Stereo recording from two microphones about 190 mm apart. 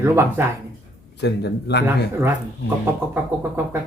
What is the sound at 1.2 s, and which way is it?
Speech, 60° left (ahead or behind).